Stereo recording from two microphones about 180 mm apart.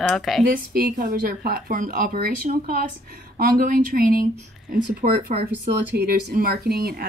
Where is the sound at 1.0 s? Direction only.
55° right (ahead or behind).